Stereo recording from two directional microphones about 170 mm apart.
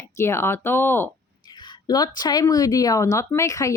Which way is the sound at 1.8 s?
25° left (ahead or behind).